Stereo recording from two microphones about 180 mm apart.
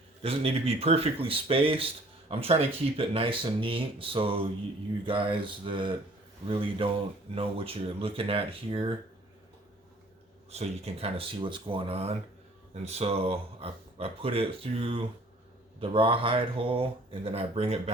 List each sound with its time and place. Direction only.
0.2 s speech: 35° right (ahead or behind)
10.5 s speech: 35° right (ahead or behind)